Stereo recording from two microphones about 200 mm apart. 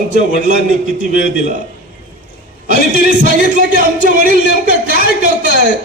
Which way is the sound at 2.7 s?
40° right (ahead or behind).